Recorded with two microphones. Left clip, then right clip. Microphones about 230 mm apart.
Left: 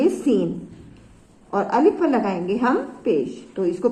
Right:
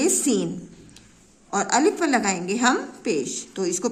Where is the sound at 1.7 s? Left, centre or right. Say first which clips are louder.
Left 2 dB; right.